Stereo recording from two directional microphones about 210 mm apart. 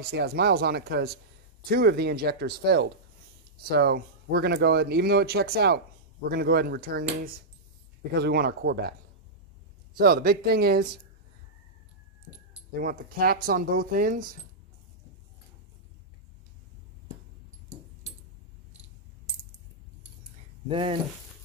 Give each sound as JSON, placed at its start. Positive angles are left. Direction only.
{"t": 0.0, "sound": "speech", "side_deg": -50}
{"t": 9.9, "sound": "speech", "side_deg": -45}
{"t": 12.7, "sound": "speech", "side_deg": -45}
{"t": 20.6, "sound": "speech", "side_deg": -25}